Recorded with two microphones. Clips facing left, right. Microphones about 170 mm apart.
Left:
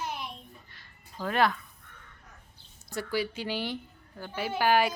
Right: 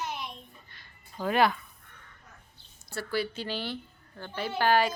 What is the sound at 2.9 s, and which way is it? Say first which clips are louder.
Speech: even; 10° left (ahead or behind).